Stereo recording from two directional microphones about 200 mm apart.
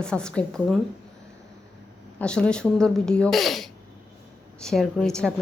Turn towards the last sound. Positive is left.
turn(degrees=5)  # may be behind; listen again after turning